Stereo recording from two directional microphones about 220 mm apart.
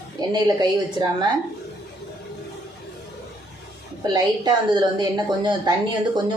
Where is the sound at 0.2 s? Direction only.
15° right (ahead or behind).